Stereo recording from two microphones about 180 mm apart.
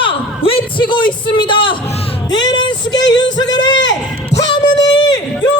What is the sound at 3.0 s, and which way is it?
Music, 90° left.